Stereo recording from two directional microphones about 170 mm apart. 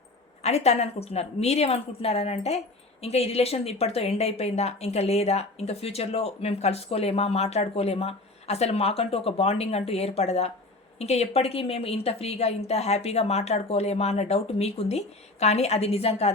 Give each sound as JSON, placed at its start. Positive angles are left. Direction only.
{"t": 0.4, "sound": "speech", "side_deg": 40}